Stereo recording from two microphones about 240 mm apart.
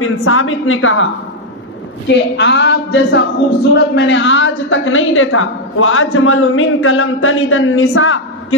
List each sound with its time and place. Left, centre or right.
0.0 s a woman's voice: left
2.0 s a woman's voice: left